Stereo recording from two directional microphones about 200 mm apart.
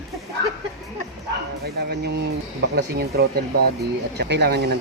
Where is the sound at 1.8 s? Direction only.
55° right (ahead or behind).